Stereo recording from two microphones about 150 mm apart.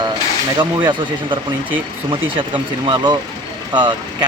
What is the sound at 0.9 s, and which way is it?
Speech, 35° right (ahead or behind).